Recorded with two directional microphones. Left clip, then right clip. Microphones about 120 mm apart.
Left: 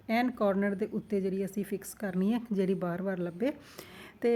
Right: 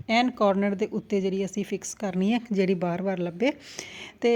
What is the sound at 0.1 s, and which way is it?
Speech, 20° right (ahead or behind).